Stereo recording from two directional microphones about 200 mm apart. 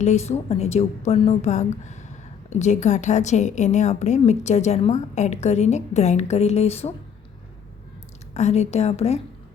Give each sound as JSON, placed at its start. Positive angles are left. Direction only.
{"t": 0.0, "sound": "a woman's voice", "side_deg": 35}
{"t": 8.3, "sound": "a woman's voice", "side_deg": 35}